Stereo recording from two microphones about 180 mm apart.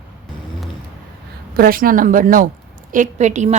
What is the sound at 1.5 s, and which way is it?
A woman's voice, 55° right (ahead or behind).